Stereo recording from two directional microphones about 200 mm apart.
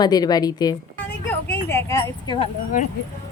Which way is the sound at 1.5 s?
15° left (ahead or behind).